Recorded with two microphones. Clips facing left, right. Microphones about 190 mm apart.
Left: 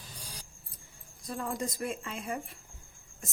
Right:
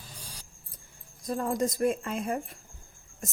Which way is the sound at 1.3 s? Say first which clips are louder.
Right 7 dB; 45° right (ahead or behind).